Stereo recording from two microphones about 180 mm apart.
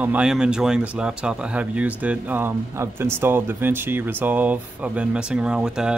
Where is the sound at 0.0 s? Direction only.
5° right (ahead or behind).